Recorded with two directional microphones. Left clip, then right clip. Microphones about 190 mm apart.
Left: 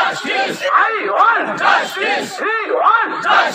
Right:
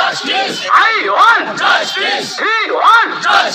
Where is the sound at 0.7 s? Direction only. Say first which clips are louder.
Right 5 dB; 15° right (ahead or behind).